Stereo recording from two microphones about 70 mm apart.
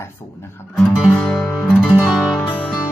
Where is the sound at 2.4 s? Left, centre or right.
Left.